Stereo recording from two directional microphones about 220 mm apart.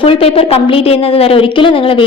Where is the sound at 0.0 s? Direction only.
25° left (ahead or behind).